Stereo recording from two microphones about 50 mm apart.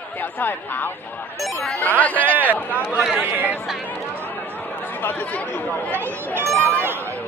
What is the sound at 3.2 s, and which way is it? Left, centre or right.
Speech, right.